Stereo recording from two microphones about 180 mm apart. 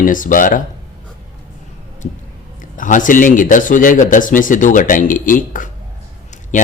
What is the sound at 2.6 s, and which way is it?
Speech, 45° left (ahead or behind).